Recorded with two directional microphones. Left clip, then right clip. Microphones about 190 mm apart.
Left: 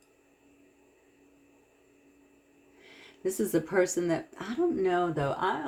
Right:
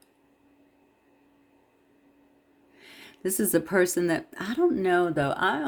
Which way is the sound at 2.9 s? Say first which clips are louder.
Right 2 dB; 55° right (ahead or behind).